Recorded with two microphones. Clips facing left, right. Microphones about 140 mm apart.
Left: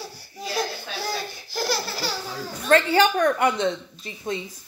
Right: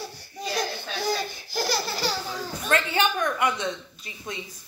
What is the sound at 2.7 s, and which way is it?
A child's voice, 35° left (ahead or behind).